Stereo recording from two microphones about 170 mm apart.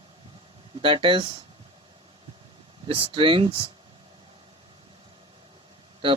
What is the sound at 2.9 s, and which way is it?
Speech, 30° right (ahead or behind).